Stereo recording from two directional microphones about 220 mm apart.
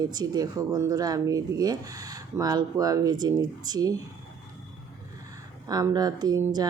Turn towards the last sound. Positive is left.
turn(degrees=-15)  # may be behind; listen again after turning